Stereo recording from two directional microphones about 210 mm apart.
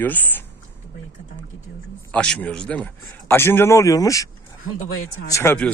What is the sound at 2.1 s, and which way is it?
A man's voice, 5° left (ahead or behind).